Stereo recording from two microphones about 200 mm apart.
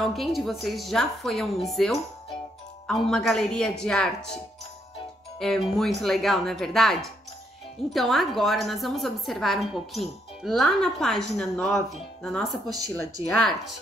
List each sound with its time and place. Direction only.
0.0 s a woman's voice: centre (ahead or behind)
5.4 s a woman's voice: centre (ahead or behind)
12.6 s speech: 20° right (ahead or behind)
13.4 s a woman's voice: centre (ahead or behind)